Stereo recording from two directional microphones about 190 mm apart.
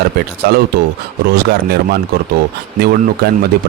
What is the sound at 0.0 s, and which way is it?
Speech, 55° right (ahead or behind).